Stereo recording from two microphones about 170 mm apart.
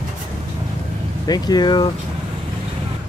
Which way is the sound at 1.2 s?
25° left (ahead or behind).